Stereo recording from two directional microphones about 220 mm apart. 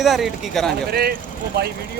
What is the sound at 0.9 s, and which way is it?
Speech, 45° right (ahead or behind).